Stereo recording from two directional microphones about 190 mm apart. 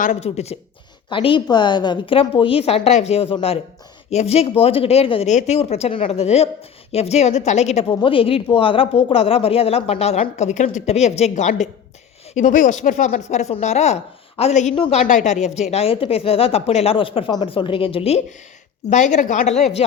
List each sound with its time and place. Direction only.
0.0 s a woman's voice: 35° left (ahead or behind)